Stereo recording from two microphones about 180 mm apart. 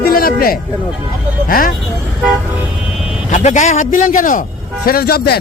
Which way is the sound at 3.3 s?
40° left (ahead or behind).